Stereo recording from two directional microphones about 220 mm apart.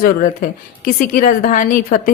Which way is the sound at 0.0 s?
40° left (ahead or behind).